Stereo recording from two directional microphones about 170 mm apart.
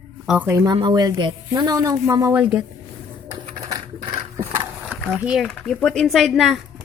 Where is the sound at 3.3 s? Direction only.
20° right (ahead or behind).